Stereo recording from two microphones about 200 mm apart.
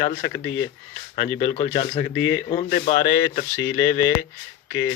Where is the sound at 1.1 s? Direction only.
30° left (ahead or behind).